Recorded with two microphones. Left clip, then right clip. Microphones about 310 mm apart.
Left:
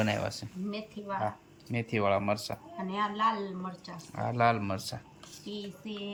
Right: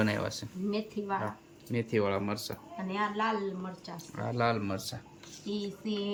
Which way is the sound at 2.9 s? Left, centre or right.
Centre.